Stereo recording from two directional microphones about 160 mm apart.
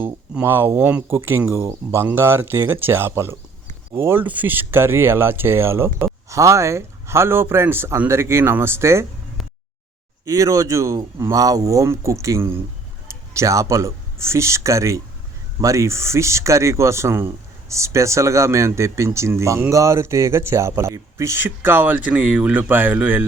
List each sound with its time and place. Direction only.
0.0 s speech: 15° right (ahead or behind)
10.2 s speech: 20° right (ahead or behind)